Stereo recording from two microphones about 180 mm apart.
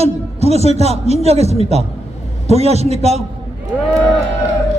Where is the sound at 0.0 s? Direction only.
35° right (ahead or behind).